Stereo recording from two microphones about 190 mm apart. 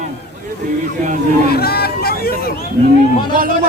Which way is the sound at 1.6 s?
55° left (ahead or behind).